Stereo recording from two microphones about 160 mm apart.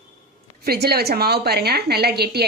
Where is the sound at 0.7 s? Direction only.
80° right.